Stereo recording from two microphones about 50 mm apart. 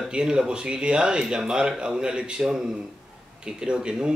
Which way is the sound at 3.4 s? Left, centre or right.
Centre.